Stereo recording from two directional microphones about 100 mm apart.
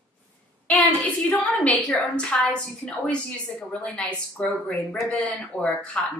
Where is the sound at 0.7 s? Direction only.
15° left (ahead or behind).